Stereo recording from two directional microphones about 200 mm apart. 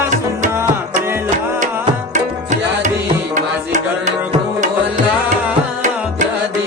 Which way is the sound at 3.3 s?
35° right (ahead or behind).